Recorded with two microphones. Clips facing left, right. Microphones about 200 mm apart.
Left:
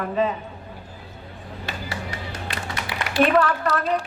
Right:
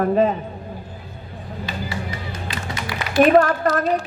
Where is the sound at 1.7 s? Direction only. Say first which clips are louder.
Right 3 dB; 75° left (ahead or behind).